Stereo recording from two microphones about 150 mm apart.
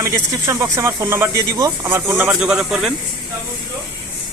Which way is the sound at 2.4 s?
5° right (ahead or behind).